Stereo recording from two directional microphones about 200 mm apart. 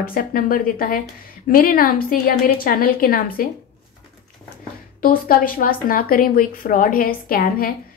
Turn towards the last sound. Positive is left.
turn(degrees=45)  # may be behind; listen again after turning